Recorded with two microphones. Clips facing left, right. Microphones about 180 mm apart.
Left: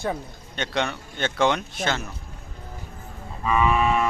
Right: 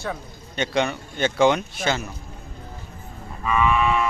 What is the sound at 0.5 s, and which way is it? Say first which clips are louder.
Speech: right 4 dB; centre (ahead or behind).